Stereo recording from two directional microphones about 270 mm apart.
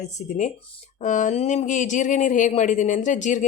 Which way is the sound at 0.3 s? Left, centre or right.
Left.